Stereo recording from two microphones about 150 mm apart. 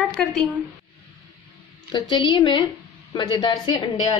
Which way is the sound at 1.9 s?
30° left (ahead or behind).